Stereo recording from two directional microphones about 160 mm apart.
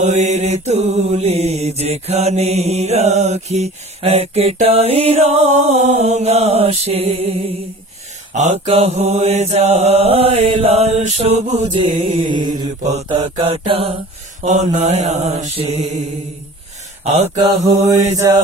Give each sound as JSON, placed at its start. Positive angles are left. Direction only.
{"t": 0.0, "sound": "mantra", "side_deg": -45}
{"t": 11.8, "sound": "mantra", "side_deg": -30}
{"t": 12.8, "sound": "mantra", "side_deg": -45}
{"t": 17.0, "sound": "speech", "side_deg": -40}
{"t": 18.2, "sound": "mantra", "side_deg": -20}